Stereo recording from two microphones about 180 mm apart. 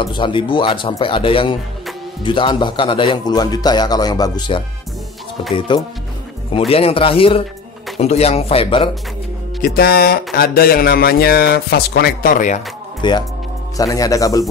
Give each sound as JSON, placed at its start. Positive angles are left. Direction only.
{"t": 0.0, "sound": "a man's voice", "side_deg": 25}
{"t": 9.8, "sound": "a sound", "side_deg": 55}
{"t": 13.0, "sound": "a man's voice", "side_deg": 25}